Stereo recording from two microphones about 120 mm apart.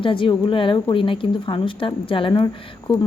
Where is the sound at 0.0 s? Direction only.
45° left (ahead or behind).